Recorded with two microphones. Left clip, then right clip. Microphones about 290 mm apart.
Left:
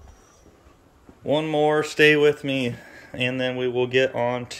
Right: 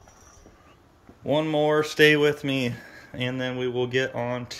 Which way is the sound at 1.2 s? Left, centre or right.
Centre.